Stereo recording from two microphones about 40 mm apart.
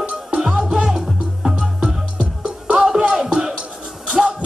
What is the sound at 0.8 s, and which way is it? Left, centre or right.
Music, centre.